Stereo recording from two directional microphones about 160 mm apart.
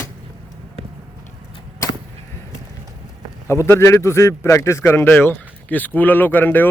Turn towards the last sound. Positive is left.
turn(degrees=10)  # may be behind; listen again after turning